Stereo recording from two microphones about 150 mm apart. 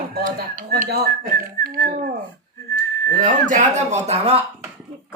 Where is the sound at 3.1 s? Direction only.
65° right (ahead or behind); by 4.4 s 45° right (ahead or behind).